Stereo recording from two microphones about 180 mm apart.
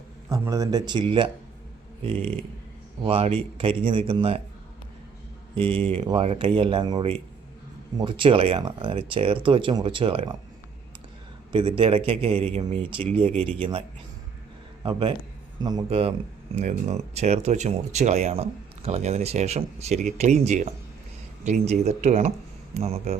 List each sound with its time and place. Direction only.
0.3 s speech: 15° right (ahead or behind)
3.0 s speech: 35° right (ahead or behind)
5.5 s speech: 30° right (ahead or behind)
11.8 s speech: 30° right (ahead or behind)
14.8 s speech: 30° right (ahead or behind)